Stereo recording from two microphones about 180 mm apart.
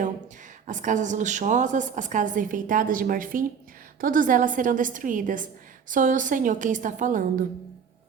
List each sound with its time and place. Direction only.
0.7 s a woman's voice: 45° right (ahead or behind)